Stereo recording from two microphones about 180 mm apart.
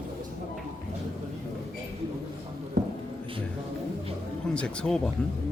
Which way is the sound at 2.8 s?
65° right (ahead or behind).